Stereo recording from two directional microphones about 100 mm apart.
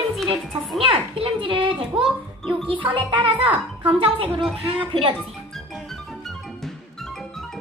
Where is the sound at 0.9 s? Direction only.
70° right (ahead or behind).